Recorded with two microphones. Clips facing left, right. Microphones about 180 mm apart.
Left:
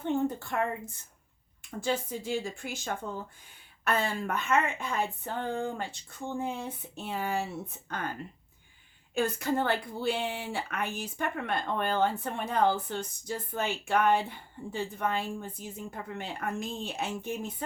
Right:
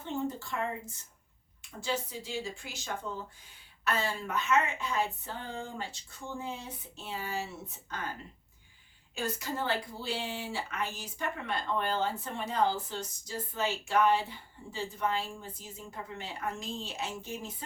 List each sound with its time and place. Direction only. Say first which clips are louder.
0.0 s a sound: left 5 dB; 55° left (ahead or behind)
1.8 s a woman's voice: left 4 dB; 50° left (ahead or behind)
9.1 s a woman's voice: left 7 dB; 55° left (ahead or behind)